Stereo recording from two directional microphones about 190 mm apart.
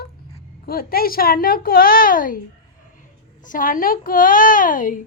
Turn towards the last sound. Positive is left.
turn(degrees=45)  # may be behind; listen again after turning